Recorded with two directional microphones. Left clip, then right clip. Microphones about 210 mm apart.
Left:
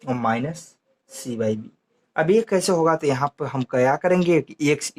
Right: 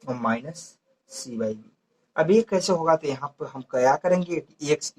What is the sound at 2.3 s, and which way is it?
Speech, 40° left (ahead or behind).